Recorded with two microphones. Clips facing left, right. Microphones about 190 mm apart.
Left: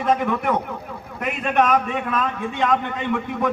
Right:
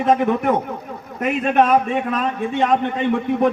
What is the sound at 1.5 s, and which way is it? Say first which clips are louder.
A man's voice: right 2 dB; 30° right (ahead or behind).